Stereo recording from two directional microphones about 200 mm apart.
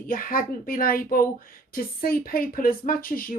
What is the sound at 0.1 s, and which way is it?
Speech, 45° left (ahead or behind).